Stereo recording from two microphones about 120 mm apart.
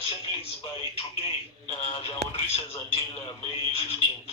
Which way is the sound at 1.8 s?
55° left (ahead or behind).